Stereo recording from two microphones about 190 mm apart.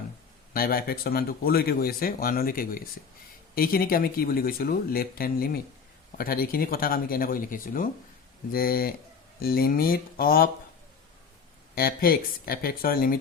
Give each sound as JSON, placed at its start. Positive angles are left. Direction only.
{"t": 0.5, "sound": "speech", "side_deg": 50}
{"t": 11.7, "sound": "speech", "side_deg": 50}